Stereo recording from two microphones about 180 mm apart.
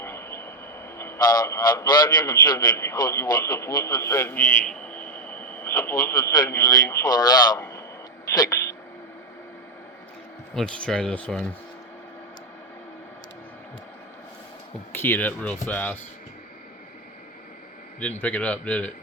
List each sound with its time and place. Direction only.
0.0 s vehicle: 15° left (ahead or behind)
0.9 s a man's voice: 15° left (ahead or behind)
10.5 s speech: 5° left (ahead or behind)
14.9 s a man's voice: 10° left (ahead or behind)
18.2 s a man's voice: 10° left (ahead or behind)